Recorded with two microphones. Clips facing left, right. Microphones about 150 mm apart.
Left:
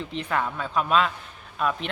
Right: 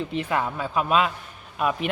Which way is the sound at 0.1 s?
5° right (ahead or behind).